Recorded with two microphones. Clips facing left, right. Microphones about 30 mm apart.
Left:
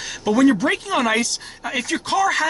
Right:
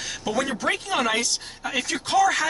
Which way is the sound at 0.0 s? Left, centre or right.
Centre.